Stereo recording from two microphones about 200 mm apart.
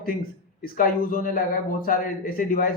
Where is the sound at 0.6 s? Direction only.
45° left (ahead or behind).